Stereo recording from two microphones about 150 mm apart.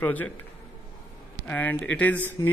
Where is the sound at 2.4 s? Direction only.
20° left (ahead or behind).